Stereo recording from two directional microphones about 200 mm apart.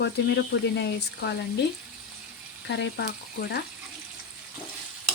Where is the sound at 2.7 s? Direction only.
60° left (ahead or behind).